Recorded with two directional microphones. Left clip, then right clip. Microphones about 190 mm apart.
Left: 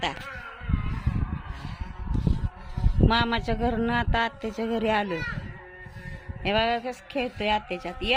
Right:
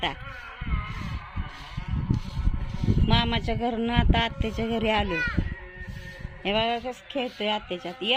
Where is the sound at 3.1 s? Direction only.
Centre (ahead or behind).